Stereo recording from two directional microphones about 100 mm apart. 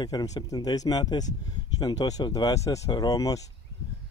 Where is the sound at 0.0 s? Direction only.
40° left (ahead or behind).